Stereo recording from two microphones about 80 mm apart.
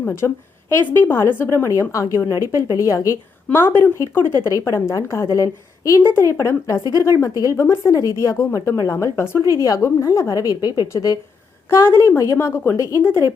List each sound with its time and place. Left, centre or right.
0.7 s a woman's voice: left
3.5 s a woman's voice: left
11.7 s speech: left
12.7 s a woman's voice: left